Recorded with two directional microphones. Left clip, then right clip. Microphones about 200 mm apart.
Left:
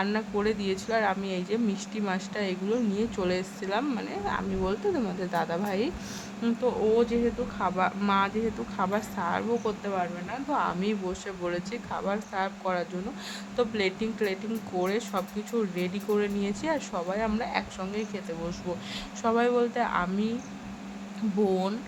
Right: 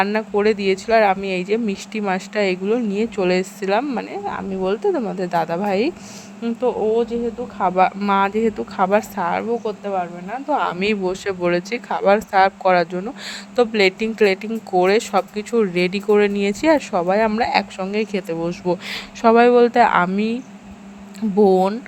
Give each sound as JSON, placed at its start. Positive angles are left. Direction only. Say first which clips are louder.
{"t": 0.0, "sound": "speech", "louder": "right 11 dB", "side_deg": -35}
{"t": 7.6, "sound": "speech", "louder": "right 11 dB", "side_deg": -40}
{"t": 10.5, "sound": "speech", "louder": "right 9 dB", "side_deg": -40}
{"t": 21.4, "sound": "speech", "louder": "right 13 dB", "side_deg": -35}